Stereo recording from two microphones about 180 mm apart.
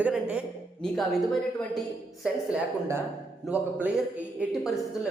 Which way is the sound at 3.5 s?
10° right (ahead or behind).